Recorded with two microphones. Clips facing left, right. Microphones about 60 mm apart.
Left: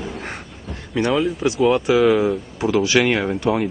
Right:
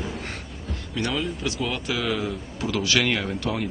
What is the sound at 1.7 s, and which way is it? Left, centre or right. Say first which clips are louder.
Speech: left 12 dB; left.